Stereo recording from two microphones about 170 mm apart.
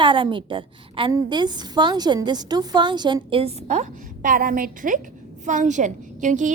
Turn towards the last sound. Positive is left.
turn(degrees=-45)  # may be behind; listen again after turning